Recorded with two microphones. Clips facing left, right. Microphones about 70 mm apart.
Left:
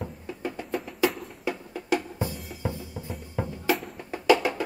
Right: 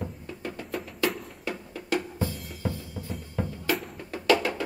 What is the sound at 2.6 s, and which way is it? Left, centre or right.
Music, left.